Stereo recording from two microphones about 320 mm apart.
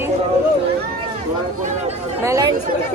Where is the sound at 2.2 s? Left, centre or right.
Centre.